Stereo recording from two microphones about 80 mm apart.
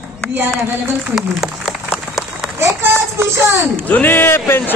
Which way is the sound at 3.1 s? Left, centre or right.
Right.